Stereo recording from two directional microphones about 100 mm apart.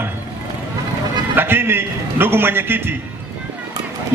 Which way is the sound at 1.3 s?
20° right (ahead or behind).